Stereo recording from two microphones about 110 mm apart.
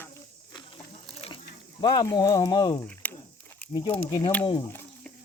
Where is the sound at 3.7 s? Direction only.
50° left (ahead or behind).